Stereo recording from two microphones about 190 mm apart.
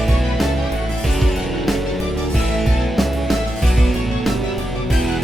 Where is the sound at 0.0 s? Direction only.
Centre (ahead or behind).